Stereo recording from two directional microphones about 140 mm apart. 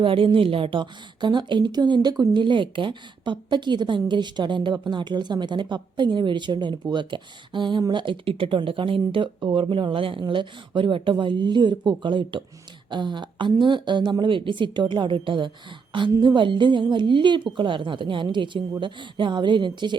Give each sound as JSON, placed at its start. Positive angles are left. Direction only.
{"t": 0.0, "sound": "a woman's voice", "side_deg": -40}